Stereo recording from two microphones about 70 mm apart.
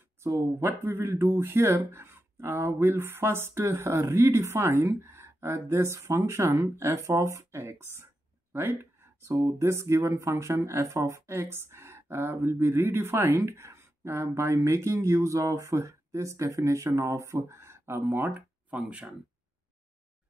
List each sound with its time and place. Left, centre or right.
0.2 s speech: right
8.5 s a sound: right
9.4 s speech: right
18.0 s speech: right
18.3 s speech: centre